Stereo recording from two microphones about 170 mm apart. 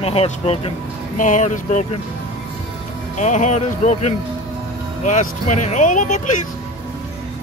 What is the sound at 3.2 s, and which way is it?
Speech, 45° left (ahead or behind).